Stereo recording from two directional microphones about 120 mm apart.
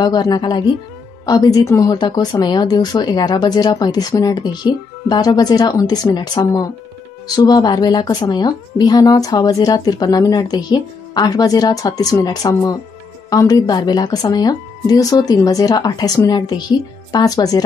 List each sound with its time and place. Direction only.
0.0 s speech: 35° left (ahead or behind)